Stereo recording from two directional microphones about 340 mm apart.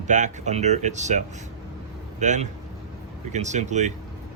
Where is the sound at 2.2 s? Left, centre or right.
Right.